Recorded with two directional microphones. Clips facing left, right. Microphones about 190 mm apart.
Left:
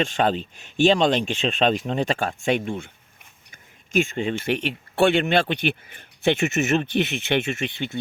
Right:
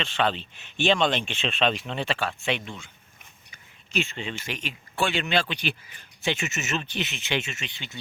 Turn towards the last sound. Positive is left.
turn(degrees=55)  # may be behind; listen again after turning